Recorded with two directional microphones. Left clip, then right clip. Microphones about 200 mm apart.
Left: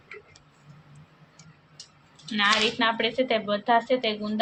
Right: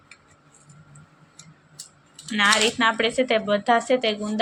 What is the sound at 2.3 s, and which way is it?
Speech, 25° right (ahead or behind).